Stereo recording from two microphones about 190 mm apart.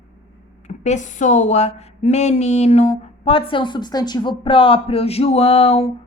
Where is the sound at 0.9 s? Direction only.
40° left (ahead or behind).